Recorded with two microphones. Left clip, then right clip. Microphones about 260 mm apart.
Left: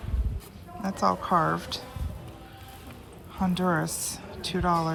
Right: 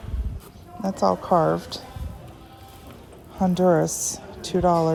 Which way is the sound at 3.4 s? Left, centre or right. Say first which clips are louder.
Right 8 dB; right.